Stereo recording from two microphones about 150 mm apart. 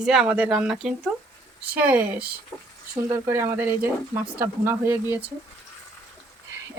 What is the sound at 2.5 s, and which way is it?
Speech, 10° left (ahead or behind).